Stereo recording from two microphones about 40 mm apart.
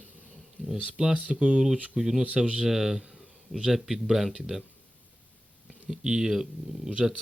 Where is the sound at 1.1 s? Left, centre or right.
Right; by 2.2 s centre.